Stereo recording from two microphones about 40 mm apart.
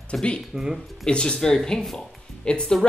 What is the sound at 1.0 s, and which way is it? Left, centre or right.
Speech, left.